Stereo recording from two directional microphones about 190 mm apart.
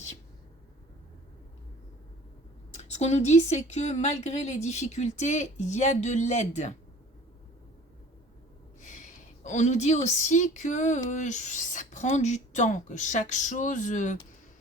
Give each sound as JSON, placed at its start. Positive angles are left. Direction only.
{"t": 2.7, "sound": "speech", "side_deg": 35}
{"t": 8.8, "sound": "a woman's voice", "side_deg": 40}